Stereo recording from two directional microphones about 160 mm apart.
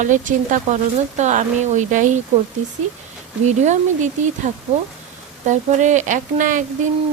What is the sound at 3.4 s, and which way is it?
Speech, 50° right (ahead or behind).